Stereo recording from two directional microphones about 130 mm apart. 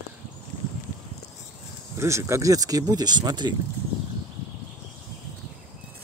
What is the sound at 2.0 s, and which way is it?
Speech, 20° right (ahead or behind).